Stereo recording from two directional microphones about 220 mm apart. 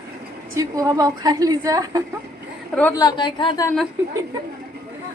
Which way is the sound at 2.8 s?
10° left (ahead or behind).